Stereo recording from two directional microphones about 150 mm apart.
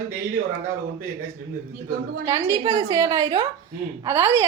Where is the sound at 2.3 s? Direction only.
20° right (ahead or behind).